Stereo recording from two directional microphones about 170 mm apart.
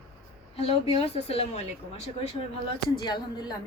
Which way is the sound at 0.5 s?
35° left (ahead or behind).